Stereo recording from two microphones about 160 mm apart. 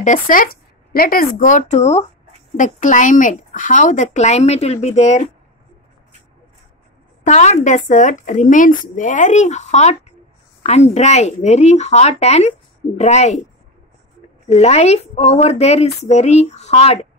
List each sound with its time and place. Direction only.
0.0 s speech: 55° left (ahead or behind)
2.5 s speech: 50° left (ahead or behind)
7.2 s speech: 45° left (ahead or behind)
14.5 s speech: 40° left (ahead or behind)